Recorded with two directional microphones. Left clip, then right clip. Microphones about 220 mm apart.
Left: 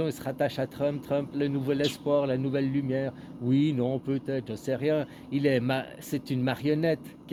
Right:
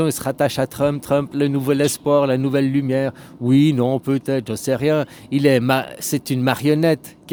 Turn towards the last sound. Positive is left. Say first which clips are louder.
# right 10 dB
turn(degrees=-35)  # may be behind; listen again after turning